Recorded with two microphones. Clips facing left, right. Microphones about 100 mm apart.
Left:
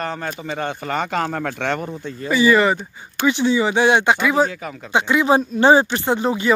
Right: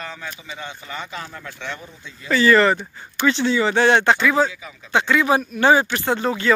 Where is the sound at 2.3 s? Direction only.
10° left (ahead or behind).